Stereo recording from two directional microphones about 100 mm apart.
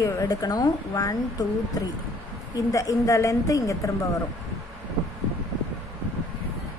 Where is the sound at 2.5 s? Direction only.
35° left (ahead or behind).